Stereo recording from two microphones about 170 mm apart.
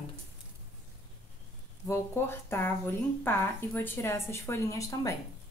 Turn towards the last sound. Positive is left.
turn(degrees=20)  # may be behind; listen again after turning